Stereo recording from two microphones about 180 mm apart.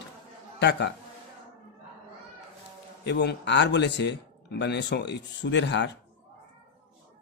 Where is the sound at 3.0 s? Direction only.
70° left (ahead or behind).